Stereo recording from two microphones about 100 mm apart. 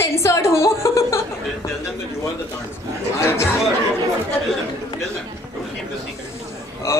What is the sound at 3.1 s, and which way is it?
Speech, 25° left (ahead or behind).